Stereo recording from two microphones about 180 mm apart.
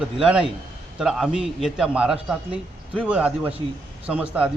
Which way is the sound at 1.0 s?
5° right (ahead or behind).